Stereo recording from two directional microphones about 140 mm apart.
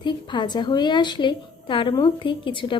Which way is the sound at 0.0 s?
35° left (ahead or behind).